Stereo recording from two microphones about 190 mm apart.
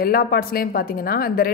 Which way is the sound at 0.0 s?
50° left (ahead or behind).